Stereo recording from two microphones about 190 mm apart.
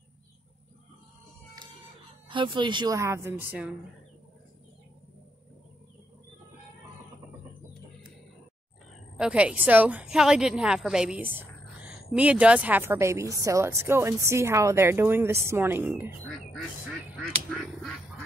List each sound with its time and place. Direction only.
2.2 s a woman's voice: 25° right (ahead or behind); by 3.7 s 10° right (ahead or behind)
9.1 s a woman's voice: 5° right (ahead or behind)